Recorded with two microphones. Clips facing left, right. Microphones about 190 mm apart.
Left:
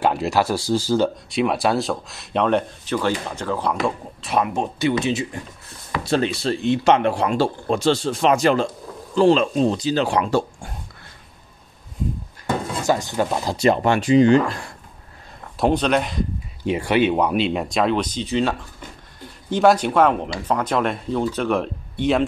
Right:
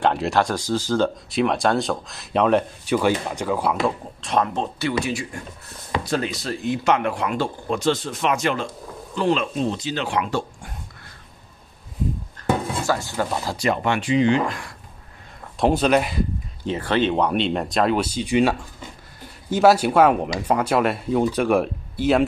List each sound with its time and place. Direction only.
0.0 s speech: 5° left (ahead or behind)
2.8 s speech: 10° right (ahead or behind)
3.8 s speech: 5° left (ahead or behind); by 10.7 s 35° left (ahead or behind)
12.8 s speech: 20° left (ahead or behind)
13.7 s speech: 40° left (ahead or behind)
15.5 s speech: 5° right (ahead or behind)
16.6 s speech: 10° left (ahead or behind); by 22.2 s 5° right (ahead or behind)